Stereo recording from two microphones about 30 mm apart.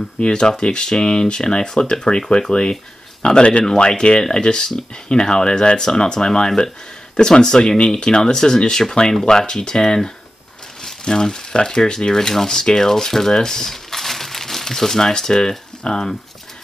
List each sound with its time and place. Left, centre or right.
0.3 s speech: left
3.6 s speech: left